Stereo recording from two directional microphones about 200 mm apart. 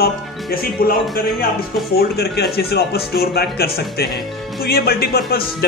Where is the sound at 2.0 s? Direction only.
50° left (ahead or behind).